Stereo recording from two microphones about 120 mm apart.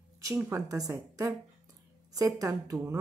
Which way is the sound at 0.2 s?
20° right (ahead or behind).